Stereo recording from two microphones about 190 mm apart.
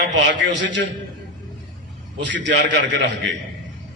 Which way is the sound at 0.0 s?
70° right (ahead or behind).